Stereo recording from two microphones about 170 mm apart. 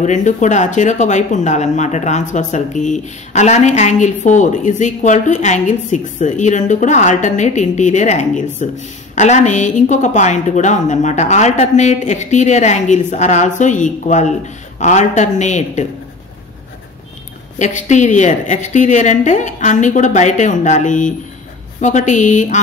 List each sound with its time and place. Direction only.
0.0 s speech: 45° left (ahead or behind)
17.6 s speech: 45° left (ahead or behind)